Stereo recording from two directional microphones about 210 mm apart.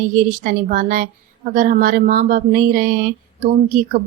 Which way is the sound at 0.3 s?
40° right (ahead or behind).